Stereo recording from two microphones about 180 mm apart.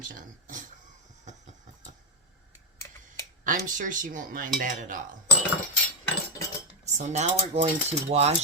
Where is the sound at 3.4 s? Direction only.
45° right (ahead or behind).